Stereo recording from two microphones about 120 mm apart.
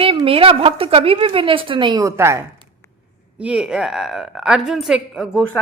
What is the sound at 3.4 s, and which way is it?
A woman's voice, 5° right (ahead or behind).